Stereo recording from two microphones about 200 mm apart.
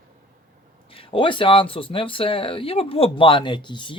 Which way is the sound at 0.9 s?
25° left (ahead or behind).